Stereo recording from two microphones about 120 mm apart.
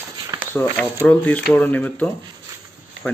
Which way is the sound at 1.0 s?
10° left (ahead or behind).